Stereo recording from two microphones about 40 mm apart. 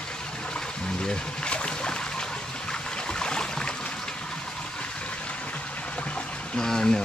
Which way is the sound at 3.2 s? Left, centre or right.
Centre.